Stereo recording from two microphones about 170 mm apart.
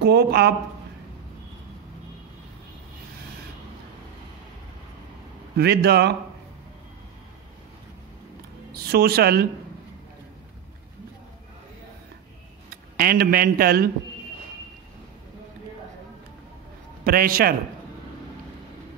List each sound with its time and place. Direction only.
0.0 s speech: 75° right (ahead or behind)
5.6 s speech: 70° right (ahead or behind)
8.7 s speech: 65° right (ahead or behind)
12.6 s speech: 60° right (ahead or behind)
17.0 s speech: 60° right (ahead or behind)